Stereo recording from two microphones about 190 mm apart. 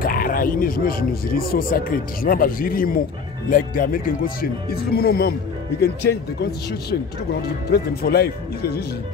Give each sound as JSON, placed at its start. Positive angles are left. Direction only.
{"t": 0.0, "sound": "speech", "side_deg": 50}